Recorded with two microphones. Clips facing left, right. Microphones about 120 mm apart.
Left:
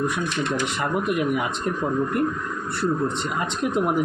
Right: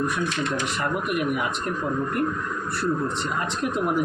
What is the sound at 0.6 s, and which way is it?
Speech, 25° left (ahead or behind).